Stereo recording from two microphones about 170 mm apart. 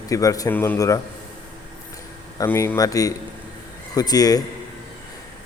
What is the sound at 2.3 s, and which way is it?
A man's voice, 15° left (ahead or behind).